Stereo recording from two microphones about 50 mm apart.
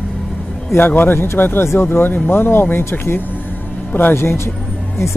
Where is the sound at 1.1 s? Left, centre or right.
Left.